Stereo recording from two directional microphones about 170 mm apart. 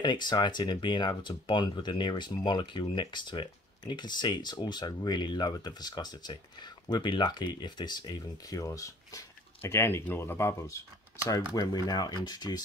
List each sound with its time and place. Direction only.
0.0 s speech: 25° left (ahead or behind)